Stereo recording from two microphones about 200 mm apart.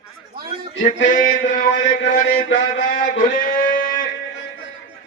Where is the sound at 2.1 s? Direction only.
45° left (ahead or behind).